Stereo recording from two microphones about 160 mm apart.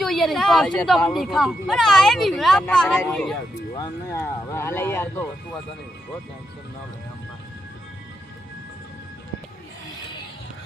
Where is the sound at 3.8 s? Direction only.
20° left (ahead or behind).